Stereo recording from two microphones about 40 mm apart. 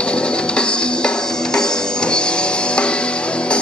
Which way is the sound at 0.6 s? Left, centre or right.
Left.